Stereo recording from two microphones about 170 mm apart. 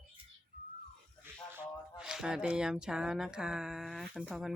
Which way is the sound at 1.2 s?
10° right (ahead or behind).